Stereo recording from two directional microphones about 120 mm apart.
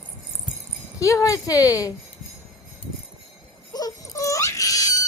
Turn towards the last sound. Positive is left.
turn(degrees=30)  # may be behind; listen again after turning